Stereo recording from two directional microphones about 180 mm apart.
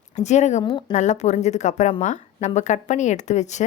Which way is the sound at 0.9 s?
40° left (ahead or behind).